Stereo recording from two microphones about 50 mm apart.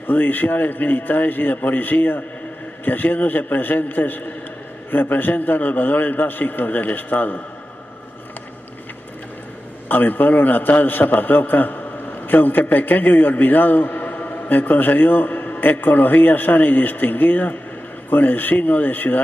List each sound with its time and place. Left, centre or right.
0.0 s a man's voice: left
9.8 s a man's voice: left